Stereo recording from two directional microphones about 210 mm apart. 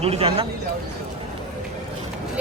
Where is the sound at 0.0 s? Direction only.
30° right (ahead or behind).